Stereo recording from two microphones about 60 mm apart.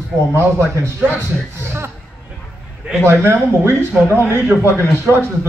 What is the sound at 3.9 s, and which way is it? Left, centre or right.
Speech, centre.